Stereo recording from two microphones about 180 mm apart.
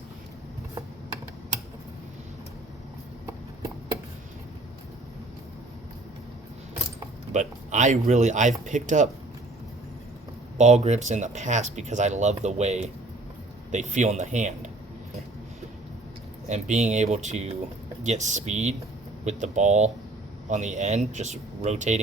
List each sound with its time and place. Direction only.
7.3 s speech: 40° right (ahead or behind)
10.6 s speech: 40° right (ahead or behind)
16.5 s speech: 40° right (ahead or behind)